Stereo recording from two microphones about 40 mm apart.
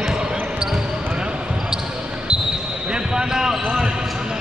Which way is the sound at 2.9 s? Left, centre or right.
Right.